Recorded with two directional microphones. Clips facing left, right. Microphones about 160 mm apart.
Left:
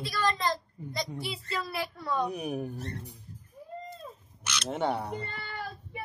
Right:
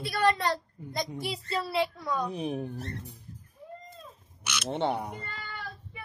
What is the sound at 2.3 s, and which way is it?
Speech, 25° right (ahead or behind).